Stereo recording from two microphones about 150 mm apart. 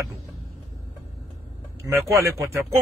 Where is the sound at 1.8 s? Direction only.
20° right (ahead or behind).